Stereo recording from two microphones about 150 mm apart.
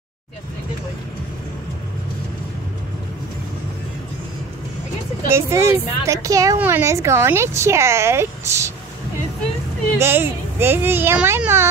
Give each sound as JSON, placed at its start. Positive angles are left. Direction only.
{"t": 5.3, "sound": "a woman's voice", "side_deg": -20}
{"t": 9.9, "sound": "speech", "side_deg": -15}